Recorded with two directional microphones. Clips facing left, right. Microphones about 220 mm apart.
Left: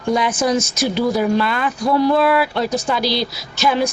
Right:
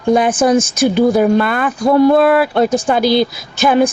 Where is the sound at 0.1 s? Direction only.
50° right (ahead or behind).